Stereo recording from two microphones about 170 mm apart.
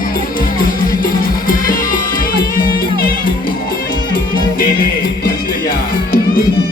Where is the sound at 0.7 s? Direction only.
55° left (ahead or behind).